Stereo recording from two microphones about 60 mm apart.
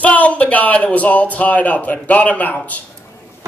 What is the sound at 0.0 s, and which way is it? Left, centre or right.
A man's voice, left.